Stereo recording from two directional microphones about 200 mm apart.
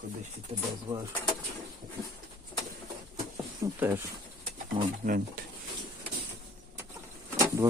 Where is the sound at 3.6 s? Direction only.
15° right (ahead or behind).